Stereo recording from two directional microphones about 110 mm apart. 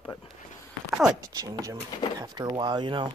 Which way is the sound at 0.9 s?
5° right (ahead or behind).